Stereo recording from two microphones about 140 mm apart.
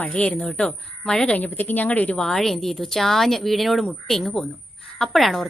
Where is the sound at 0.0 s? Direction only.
10° left (ahead or behind).